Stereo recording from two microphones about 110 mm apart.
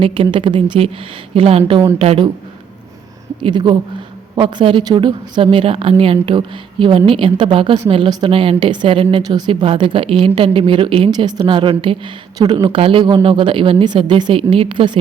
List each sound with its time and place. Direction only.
0.0 s a woman's voice: 50° right (ahead or behind)
1.3 s a woman's voice: 60° right (ahead or behind)
3.4 s a woman's voice: 45° right (ahead or behind)
11.1 s a woman's voice: 40° right (ahead or behind)